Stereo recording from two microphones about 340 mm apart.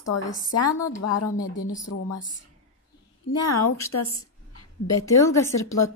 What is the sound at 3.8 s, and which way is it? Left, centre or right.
Speech, left.